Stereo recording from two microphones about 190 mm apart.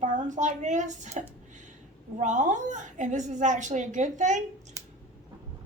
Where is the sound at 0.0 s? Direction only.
40° right (ahead or behind).